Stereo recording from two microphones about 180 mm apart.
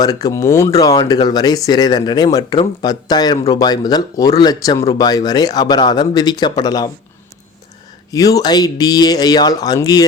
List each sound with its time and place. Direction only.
0.0 s speech: 20° left (ahead or behind)
8.1 s speech: 20° left (ahead or behind)